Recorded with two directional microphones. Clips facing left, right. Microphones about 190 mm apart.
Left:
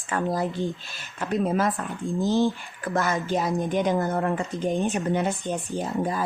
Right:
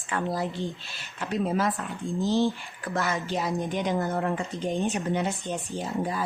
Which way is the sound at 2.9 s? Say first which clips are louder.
Left 3 dB; 40° left (ahead or behind).